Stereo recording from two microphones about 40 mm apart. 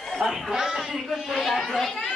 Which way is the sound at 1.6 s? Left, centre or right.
Centre.